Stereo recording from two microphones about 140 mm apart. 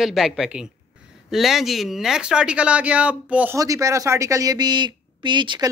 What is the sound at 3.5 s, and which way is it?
A woman's voice, 25° right (ahead or behind).